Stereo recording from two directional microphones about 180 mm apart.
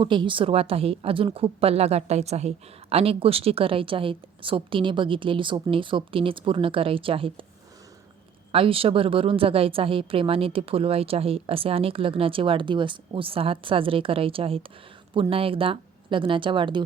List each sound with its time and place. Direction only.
0.0 s a woman's voice: 25° right (ahead or behind)
8.5 s a woman's voice: 30° right (ahead or behind)